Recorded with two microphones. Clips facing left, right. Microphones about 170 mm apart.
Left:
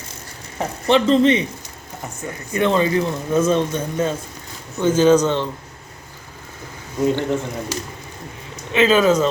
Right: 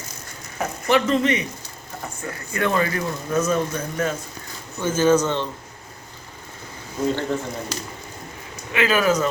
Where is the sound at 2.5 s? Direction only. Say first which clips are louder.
Left 5 dB; 20° left (ahead or behind).